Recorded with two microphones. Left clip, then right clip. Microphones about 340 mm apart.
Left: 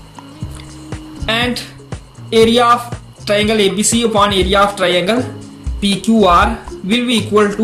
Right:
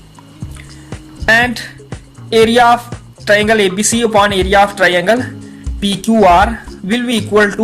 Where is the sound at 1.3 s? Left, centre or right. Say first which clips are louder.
Right 6 dB; right.